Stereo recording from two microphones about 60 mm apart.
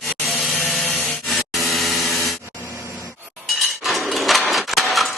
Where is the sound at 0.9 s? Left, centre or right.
Left.